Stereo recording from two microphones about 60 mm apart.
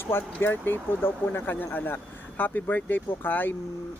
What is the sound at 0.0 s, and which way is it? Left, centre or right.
Speech, left.